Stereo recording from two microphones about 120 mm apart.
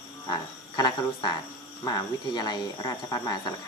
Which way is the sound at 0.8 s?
35° left (ahead or behind).